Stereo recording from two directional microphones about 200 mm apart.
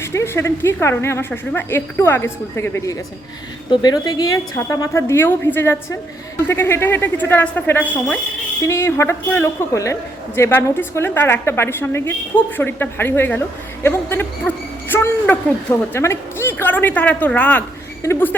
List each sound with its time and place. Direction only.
0.0 s a woman's voice: 15° left (ahead or behind)